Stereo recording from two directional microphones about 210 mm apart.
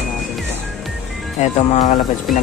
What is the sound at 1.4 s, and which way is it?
Speech, 35° left (ahead or behind).